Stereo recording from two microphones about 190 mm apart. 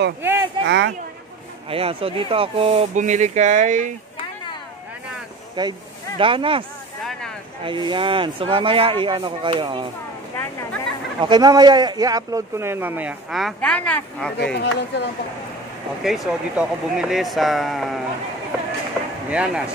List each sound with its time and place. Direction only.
0.2 s speech: 10° right (ahead or behind)
0.7 s speech: 65° right (ahead or behind)
1.7 s speech: 30° right (ahead or behind)
5.6 s speech: 25° right (ahead or behind)
7.6 s speech: 25° right (ahead or behind)
11.1 s speech: 25° right (ahead or behind); by 14.5 s 5° left (ahead or behind)
14.5 s speech: 60° left (ahead or behind)
16.0 s speech: centre (ahead or behind)
19.3 s speech: 5° right (ahead or behind)